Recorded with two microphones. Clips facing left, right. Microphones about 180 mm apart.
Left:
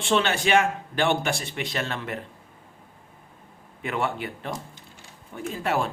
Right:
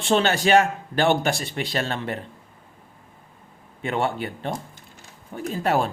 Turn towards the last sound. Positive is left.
turn(degrees=-40)  # may be behind; listen again after turning